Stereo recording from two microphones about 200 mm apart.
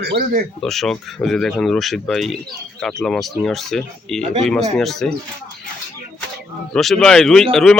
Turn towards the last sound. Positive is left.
turn(degrees=5)  # may be behind; listen again after turning